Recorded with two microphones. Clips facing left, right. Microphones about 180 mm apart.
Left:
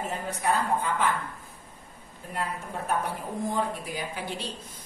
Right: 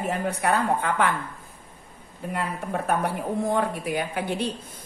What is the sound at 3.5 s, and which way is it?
Speech, 65° right (ahead or behind).